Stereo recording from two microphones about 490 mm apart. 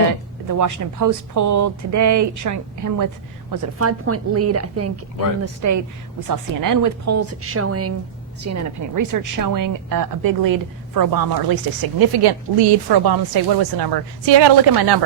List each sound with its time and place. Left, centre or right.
0.4 s a woman's voice: right